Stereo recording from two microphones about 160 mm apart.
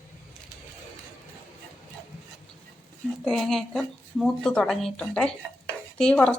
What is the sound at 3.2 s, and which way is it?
Speech, centre (ahead or behind).